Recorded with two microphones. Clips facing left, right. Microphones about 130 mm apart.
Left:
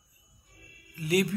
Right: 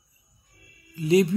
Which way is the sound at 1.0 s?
25° right (ahead or behind).